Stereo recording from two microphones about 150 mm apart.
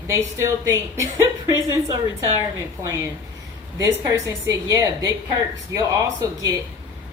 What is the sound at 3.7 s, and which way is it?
A woman's voice, 20° right (ahead or behind).